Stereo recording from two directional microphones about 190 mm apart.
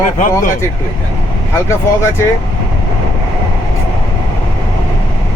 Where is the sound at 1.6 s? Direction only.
15° left (ahead or behind).